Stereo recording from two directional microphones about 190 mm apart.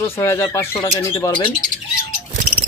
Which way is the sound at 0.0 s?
15° left (ahead or behind).